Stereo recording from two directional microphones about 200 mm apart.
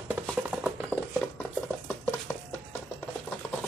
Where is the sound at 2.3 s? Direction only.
10° left (ahead or behind).